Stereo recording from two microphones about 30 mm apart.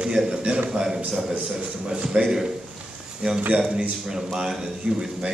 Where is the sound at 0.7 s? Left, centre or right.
Centre.